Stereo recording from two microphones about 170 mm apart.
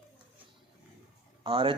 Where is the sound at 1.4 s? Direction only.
30° right (ahead or behind).